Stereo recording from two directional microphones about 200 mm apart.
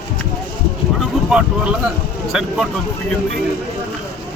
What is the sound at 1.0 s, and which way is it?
Speech, 5° right (ahead or behind).